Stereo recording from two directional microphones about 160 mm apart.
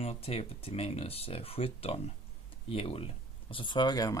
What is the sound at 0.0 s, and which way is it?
Speech, 40° left (ahead or behind).